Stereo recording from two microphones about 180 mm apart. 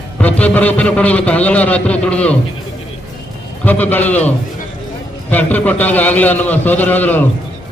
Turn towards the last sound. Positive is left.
turn(degrees=10)  # may be behind; listen again after turning